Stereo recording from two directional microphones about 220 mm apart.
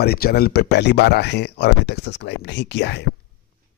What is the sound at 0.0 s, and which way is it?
Speech, 45° left (ahead or behind).